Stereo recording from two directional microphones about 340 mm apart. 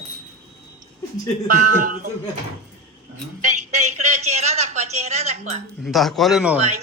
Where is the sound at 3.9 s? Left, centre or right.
Centre.